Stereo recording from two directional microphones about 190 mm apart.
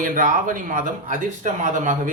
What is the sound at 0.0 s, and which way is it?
Speech, 45° right (ahead or behind).